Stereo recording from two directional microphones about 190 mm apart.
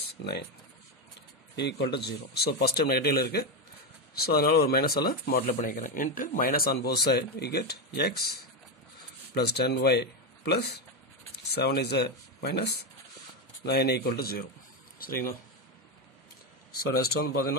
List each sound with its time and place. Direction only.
0.2 s speech: 60° left (ahead or behind)
1.6 s speech: 60° left (ahead or behind)
16.7 s speech: 55° left (ahead or behind)